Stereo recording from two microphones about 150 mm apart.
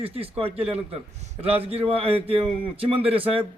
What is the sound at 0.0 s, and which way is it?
A man's voice, 40° right (ahead or behind).